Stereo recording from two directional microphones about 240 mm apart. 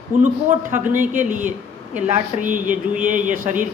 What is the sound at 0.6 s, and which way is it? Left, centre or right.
Speech, right.